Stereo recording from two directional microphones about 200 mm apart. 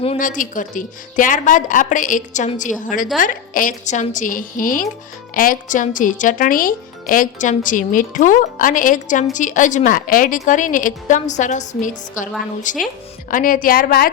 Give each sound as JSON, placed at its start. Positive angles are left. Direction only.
{"t": 0.2, "sound": "a woman's voice", "side_deg": 40}